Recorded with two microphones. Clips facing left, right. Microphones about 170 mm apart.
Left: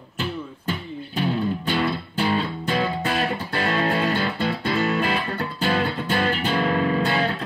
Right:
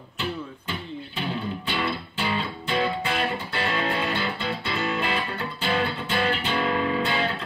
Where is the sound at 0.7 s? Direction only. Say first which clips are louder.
Left 4 dB; 45° left (ahead or behind).